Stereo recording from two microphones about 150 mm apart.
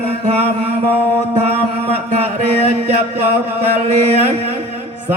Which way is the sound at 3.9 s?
45° right (ahead or behind).